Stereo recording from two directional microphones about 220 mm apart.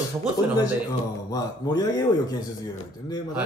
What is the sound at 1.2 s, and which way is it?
Speech, 15° left (ahead or behind).